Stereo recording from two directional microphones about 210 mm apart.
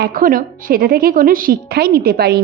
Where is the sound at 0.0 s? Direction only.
40° right (ahead or behind).